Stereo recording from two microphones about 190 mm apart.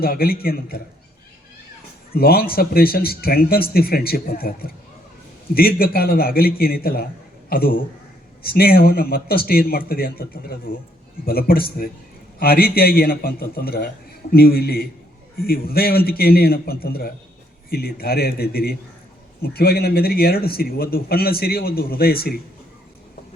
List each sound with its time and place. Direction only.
0.0 s a man's voice: 50° left (ahead or behind)
2.1 s a man's voice: 55° left (ahead or behind)